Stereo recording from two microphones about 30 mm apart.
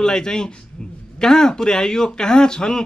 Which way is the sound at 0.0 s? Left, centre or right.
Left.